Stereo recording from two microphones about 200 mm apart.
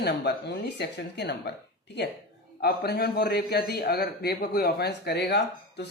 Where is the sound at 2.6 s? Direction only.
50° left (ahead or behind).